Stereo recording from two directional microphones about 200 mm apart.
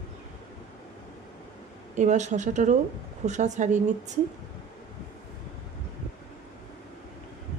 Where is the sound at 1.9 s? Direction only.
35° right (ahead or behind).